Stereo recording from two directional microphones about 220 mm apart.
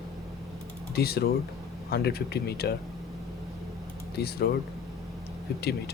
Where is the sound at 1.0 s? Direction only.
45° left (ahead or behind).